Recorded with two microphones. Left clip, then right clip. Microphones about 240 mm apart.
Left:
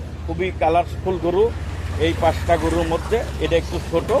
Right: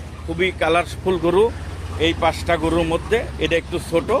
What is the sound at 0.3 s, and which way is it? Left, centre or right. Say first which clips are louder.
Speech: even; right.